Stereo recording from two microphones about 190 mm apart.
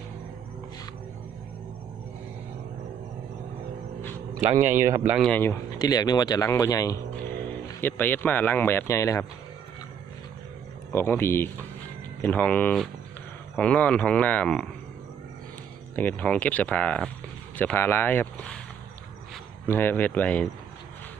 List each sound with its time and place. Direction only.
4.8 s speech: 15° right (ahead or behind)
5.2 s speech: 10° left (ahead or behind)
10.9 s speech: 10° left (ahead or behind)
16.0 s speech: 10° left (ahead or behind)
19.6 s speech: 10° left (ahead or behind)